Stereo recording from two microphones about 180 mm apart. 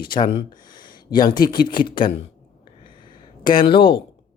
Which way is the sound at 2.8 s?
25° left (ahead or behind).